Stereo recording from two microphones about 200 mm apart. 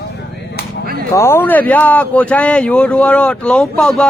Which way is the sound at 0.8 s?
50° right (ahead or behind).